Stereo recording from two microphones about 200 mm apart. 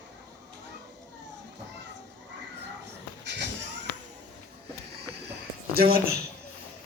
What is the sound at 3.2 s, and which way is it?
Cat, 60° right (ahead or behind).